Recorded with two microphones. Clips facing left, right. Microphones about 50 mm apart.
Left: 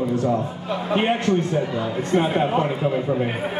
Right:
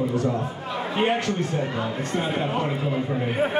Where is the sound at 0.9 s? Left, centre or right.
Left.